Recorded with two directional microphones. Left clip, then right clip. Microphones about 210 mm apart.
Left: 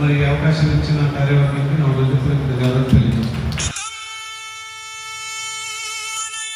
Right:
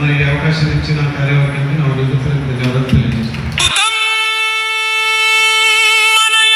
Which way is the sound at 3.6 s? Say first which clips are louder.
Right 15 dB; 80° right.